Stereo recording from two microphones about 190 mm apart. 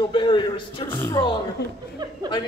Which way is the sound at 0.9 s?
20° left (ahead or behind).